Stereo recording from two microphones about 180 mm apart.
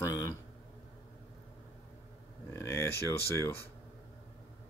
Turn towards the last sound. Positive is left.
turn(degrees=15)  # may be behind; listen again after turning